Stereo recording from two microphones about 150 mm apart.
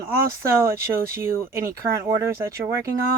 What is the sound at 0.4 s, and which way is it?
Speech, 15° right (ahead or behind).